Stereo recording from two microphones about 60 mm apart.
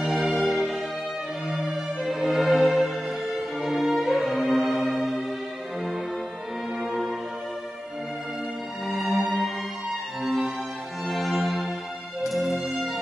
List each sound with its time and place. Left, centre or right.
0.0 s music: centre
1.5 s music: centre
2.1 s music: centre
8.9 s music: centre
11.1 s music: centre